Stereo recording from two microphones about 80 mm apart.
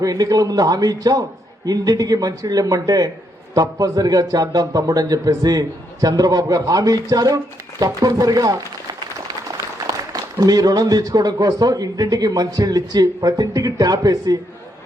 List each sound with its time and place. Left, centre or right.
0.0 s a man's voice: right
9.8 s a man's voice: right